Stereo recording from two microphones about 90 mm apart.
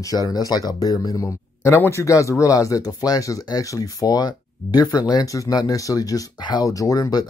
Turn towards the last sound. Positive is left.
turn(degrees=45)  # may be behind; listen again after turning